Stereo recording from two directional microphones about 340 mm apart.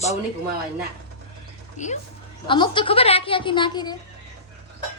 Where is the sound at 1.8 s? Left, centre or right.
Left.